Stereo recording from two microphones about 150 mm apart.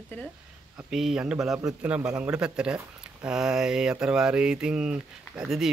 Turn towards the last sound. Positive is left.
turn(degrees=-5)  # may be behind; listen again after turning